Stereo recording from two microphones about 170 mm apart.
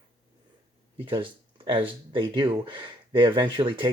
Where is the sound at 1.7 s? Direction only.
30° right (ahead or behind).